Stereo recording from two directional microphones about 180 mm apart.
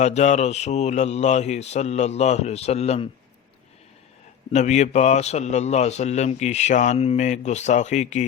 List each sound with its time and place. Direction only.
0.0 s a man's voice: 40° left (ahead or behind)
4.5 s a man's voice: 40° left (ahead or behind)